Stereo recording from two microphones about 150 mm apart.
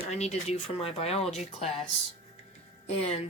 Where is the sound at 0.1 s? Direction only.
45° left (ahead or behind).